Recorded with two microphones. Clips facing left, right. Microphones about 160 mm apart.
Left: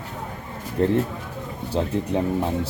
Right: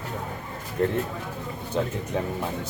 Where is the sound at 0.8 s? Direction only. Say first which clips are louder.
Left 4 dB; 30° left (ahead or behind).